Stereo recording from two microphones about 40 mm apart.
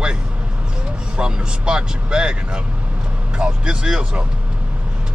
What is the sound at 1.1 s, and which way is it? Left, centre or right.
Speech, right.